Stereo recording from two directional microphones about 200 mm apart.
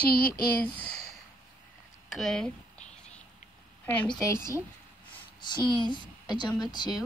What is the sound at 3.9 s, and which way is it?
A woman's voice, 10° left (ahead or behind).